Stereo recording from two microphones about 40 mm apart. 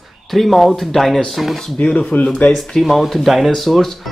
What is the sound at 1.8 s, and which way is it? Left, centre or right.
Speech, left.